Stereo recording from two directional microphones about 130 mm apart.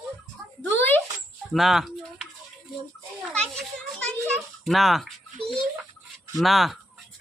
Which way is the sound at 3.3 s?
5° left (ahead or behind).